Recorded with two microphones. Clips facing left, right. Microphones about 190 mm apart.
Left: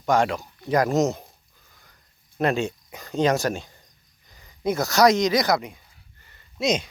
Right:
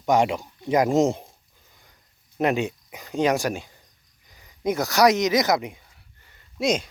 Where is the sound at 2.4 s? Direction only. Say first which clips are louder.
Even; 15° right (ahead or behind).